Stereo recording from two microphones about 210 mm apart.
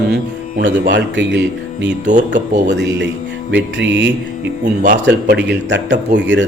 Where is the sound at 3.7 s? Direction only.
60° right (ahead or behind).